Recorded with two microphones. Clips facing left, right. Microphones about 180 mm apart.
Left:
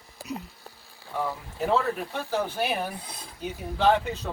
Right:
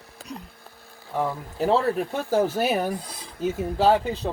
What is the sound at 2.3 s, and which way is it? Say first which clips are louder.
Speech: right 6 dB; 45° right (ahead or behind).